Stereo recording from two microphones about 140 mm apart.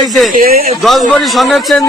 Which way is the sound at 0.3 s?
90° right.